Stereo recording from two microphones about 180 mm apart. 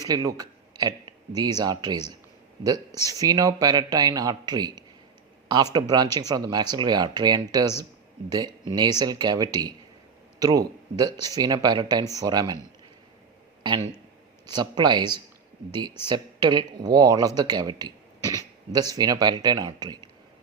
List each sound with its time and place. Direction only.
0.0 s a man's voice: 20° right (ahead or behind)
5.9 s speech: 20° right (ahead or behind)
13.6 s a man's voice: 25° right (ahead or behind)